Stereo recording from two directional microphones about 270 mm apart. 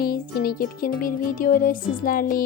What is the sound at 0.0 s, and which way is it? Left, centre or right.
Speech, left.